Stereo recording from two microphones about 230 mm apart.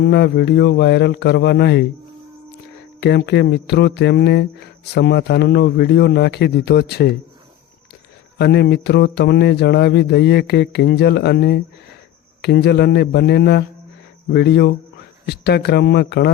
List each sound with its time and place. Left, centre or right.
0.0 s speech: left
3.0 s speech: left
8.4 s speech: left